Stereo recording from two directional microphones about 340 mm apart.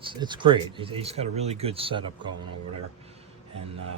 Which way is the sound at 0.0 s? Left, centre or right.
Centre.